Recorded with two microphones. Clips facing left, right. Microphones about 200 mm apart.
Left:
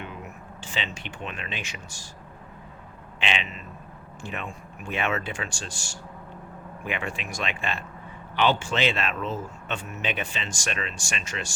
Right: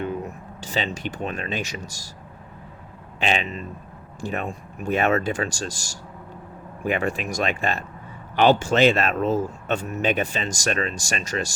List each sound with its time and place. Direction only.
0.0 s speech: 40° right (ahead or behind)
3.2 s speech: 40° right (ahead or behind)